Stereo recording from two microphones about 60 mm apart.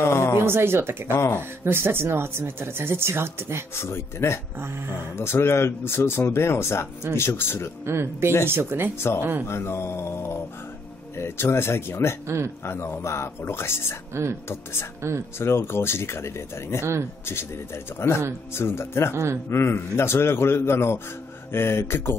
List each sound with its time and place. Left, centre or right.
0.0 s speech: left
0.4 s speech: right
1.1 s speech: left
1.6 s speech: right
3.7 s speech: left
4.6 s speech: right
5.1 s speech: left
7.8 s speech: right
8.9 s speech: left
14.1 s speech: right
14.5 s speech: left
15.0 s speech: right
15.3 s speech: left
17.9 s speech: left